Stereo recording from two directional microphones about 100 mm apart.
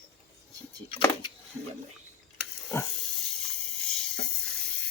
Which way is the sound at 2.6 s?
25° left (ahead or behind).